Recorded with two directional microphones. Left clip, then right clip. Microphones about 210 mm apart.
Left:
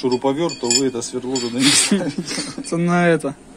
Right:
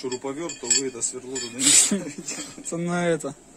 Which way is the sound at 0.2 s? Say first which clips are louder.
Left 11 dB; 25° left (ahead or behind).